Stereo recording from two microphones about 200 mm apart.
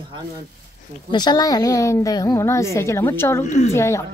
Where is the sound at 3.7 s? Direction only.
15° left (ahead or behind).